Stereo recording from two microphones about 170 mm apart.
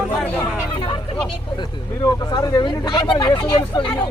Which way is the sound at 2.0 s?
20° left (ahead or behind).